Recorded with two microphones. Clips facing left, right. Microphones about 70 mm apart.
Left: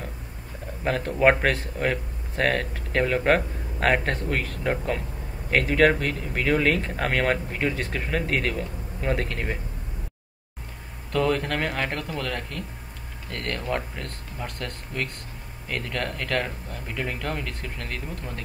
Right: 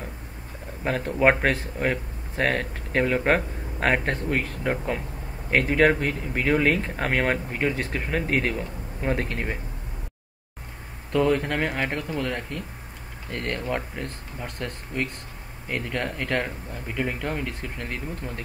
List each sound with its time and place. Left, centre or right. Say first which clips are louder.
0.8 s speech: left 1 dB; centre
11.1 s speech: right 2 dB; centre